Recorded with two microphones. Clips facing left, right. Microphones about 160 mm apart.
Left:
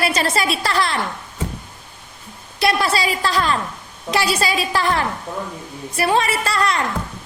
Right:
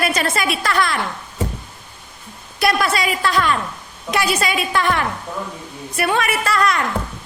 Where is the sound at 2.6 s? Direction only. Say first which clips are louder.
Even; 30° left (ahead or behind).